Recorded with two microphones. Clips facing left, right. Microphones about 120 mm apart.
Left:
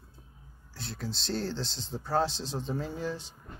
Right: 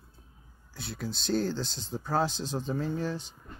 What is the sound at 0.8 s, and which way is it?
Speech, 5° right (ahead or behind).